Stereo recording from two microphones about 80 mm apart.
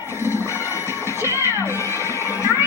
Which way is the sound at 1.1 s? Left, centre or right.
Right.